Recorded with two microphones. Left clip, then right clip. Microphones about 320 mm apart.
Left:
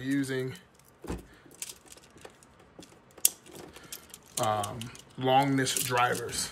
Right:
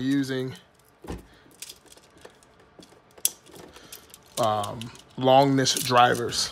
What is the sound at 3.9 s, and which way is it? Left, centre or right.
Speech, centre.